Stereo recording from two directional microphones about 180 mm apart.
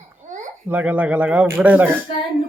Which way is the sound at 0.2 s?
45° right (ahead or behind).